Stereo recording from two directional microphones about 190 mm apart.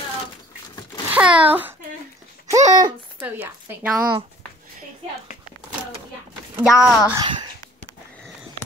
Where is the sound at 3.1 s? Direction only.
10° right (ahead or behind).